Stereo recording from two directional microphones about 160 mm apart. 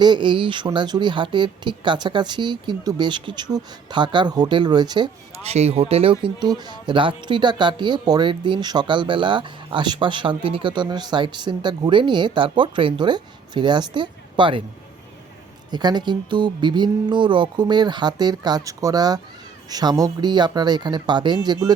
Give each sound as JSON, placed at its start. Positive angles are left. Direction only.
{"t": 0.0, "sound": "speech", "side_deg": -30}
{"t": 5.4, "sound": "speech", "side_deg": -40}
{"t": 15.7, "sound": "speech", "side_deg": -25}